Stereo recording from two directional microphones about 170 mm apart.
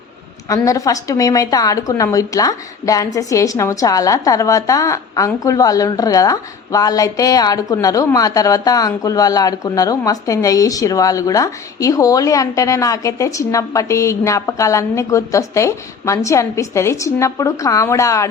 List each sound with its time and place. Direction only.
0.4 s a woman's voice: 20° left (ahead or behind)